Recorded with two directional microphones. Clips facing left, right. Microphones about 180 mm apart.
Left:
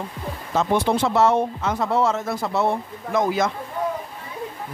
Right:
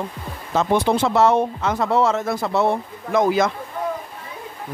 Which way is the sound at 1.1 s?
90° right.